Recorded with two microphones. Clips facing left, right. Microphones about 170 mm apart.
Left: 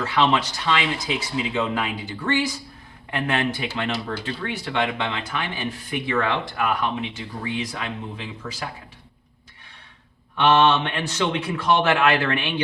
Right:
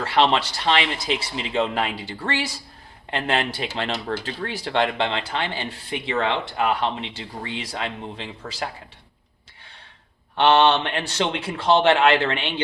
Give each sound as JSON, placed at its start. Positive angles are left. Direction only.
{"t": 0.0, "sound": "speech", "side_deg": -30}
{"t": 4.4, "sound": "speech", "side_deg": -35}
{"t": 10.3, "sound": "speech", "side_deg": -30}